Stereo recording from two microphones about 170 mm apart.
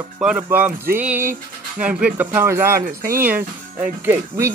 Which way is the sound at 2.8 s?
55° right (ahead or behind).